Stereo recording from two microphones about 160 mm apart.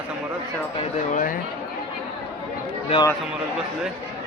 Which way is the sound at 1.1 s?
55° left (ahead or behind).